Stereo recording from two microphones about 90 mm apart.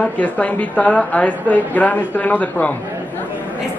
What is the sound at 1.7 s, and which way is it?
Speech, 20° left (ahead or behind).